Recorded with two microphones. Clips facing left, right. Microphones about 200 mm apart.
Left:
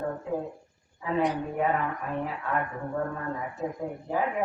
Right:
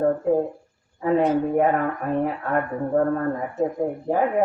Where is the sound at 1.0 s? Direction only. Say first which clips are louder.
Right 10 dB; 55° right (ahead or behind).